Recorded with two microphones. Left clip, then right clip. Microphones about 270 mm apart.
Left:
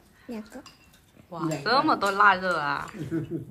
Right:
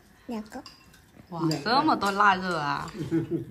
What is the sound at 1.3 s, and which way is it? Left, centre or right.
Speech, centre.